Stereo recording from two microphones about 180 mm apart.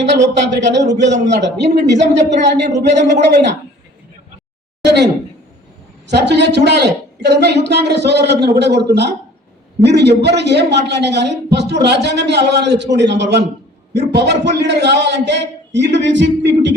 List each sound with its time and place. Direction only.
0.0 s a woman's voice: 80° right
4.8 s a sound: 70° right (ahead or behind)
6.1 s a woman's voice: 70° right (ahead or behind)